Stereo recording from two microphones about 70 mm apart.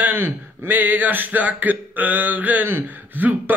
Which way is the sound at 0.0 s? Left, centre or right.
Right.